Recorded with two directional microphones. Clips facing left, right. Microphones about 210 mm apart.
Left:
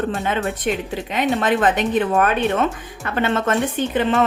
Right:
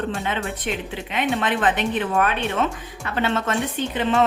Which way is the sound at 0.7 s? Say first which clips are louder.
Left 5 dB; 45° left (ahead or behind).